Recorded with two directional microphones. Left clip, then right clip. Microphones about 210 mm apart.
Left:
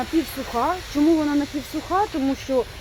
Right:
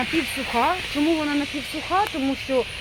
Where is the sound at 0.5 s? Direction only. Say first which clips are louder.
Right 1 dB; 35° left (ahead or behind).